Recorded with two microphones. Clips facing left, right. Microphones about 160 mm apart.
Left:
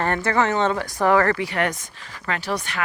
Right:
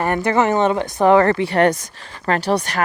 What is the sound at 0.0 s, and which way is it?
Speech, 15° right (ahead or behind).